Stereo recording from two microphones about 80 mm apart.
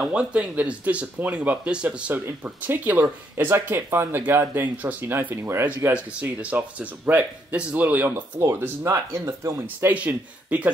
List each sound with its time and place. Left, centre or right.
0.0 s speech: centre; by 5.7 s right
6.2 s speech: right
8.4 s speech: right
9.9 s speech: centre